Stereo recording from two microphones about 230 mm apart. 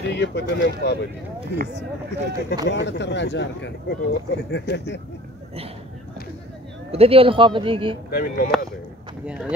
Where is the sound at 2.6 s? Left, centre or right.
Left.